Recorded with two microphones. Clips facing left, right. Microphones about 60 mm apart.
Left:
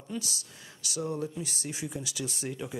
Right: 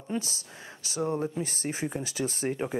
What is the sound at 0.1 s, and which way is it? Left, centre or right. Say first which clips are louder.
Speech: right 4 dB; right.